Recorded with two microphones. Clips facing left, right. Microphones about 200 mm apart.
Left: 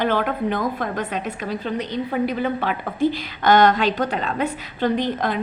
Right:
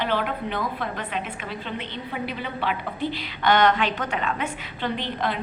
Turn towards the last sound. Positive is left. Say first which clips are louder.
# left 6 dB
turn(degrees=45)  # may be behind; listen again after turning